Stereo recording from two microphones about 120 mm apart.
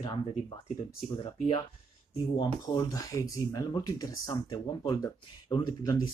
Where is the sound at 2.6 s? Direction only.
30° left (ahead or behind).